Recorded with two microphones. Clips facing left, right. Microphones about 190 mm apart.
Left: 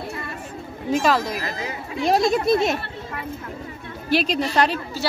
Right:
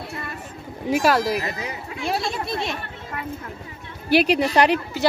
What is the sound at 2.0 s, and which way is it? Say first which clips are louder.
Speech: left 8 dB; 40° left (ahead or behind).